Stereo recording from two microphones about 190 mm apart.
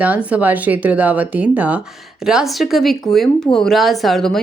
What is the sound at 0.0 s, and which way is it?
Speech, 10° right (ahead or behind).